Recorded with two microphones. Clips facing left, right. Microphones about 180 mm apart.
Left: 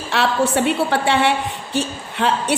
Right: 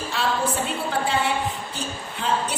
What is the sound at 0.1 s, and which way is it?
A woman's voice, 75° left (ahead or behind).